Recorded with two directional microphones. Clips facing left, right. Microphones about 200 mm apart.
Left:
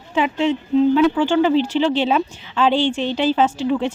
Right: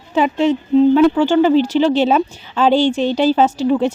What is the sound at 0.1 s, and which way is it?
Speech, 40° right (ahead or behind).